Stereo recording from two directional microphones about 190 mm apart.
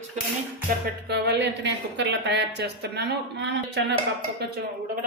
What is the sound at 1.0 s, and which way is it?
A woman's voice, 60° right (ahead or behind).